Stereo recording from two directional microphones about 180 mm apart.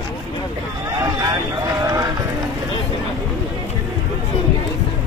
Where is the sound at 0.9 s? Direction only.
20° right (ahead or behind).